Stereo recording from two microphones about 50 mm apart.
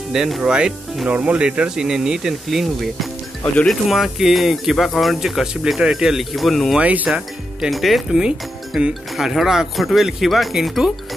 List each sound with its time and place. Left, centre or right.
0.4 s speech: centre
5.5 s speech: centre
6.8 s speech: right
7.1 s speech: centre
8.2 s speech: centre
9.1 s speech: centre